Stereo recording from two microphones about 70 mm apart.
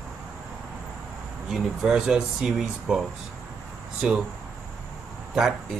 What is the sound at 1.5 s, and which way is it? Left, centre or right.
Speech, centre.